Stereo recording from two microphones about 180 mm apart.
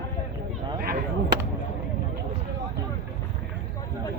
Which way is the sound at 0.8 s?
55° right (ahead or behind).